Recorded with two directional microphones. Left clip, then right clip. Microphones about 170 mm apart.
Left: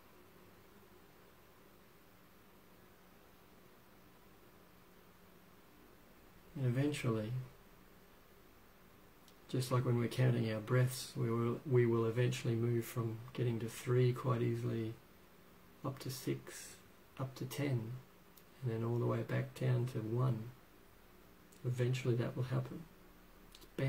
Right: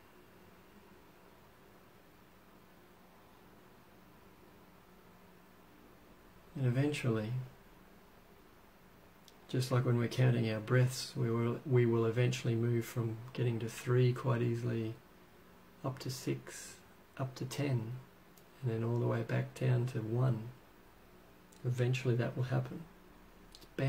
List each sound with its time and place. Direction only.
6.6 s speech: 20° left (ahead or behind)
9.5 s speech: 20° left (ahead or behind)
16.0 s speech: 20° left (ahead or behind)
21.7 s speech: 20° left (ahead or behind)